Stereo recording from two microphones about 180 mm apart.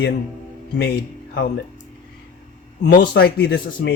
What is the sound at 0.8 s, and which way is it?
Speech, 65° left (ahead or behind).